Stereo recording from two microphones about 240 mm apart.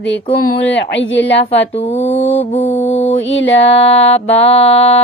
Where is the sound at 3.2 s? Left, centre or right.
Left.